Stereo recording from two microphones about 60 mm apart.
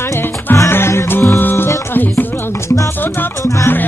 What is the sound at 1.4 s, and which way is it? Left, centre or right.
Music, left.